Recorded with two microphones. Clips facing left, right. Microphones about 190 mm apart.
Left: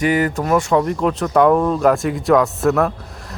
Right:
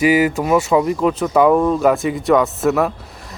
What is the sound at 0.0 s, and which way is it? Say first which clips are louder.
Speech: right 3 dB; 5° right (ahead or behind).